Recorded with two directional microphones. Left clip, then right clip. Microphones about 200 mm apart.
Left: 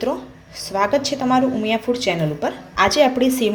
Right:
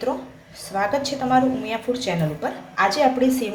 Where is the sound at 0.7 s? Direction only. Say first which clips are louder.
Left 4 dB; 35° left (ahead or behind).